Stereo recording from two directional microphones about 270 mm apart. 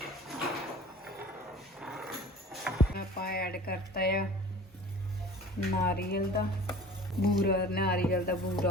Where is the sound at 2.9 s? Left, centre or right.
Left.